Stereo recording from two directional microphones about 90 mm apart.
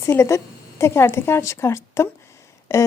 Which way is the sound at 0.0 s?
30° left (ahead or behind).